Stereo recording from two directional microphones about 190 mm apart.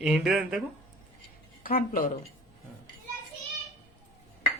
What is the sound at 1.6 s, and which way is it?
Speech, 50° left (ahead or behind).